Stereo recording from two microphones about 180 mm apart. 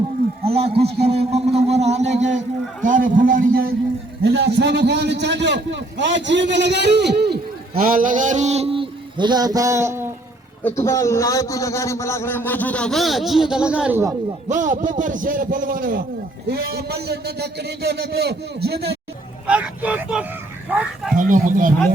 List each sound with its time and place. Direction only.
0.4 s a man's voice: 35° right (ahead or behind); by 3.7 s 50° right (ahead or behind)
4.2 s a man's voice: 70° right (ahead or behind)
7.8 s a man's voice: 50° right (ahead or behind); by 10.1 s 15° right (ahead or behind)
10.8 s a man's voice: 15° left (ahead or behind); by 14.0 s 5° right (ahead or behind)
14.4 s a man's voice: 45° right (ahead or behind)
16.5 s a man's voice: 60° right (ahead or behind)
19.5 s speech: 5° right (ahead or behind)
21.2 s a man's voice: 45° right (ahead or behind)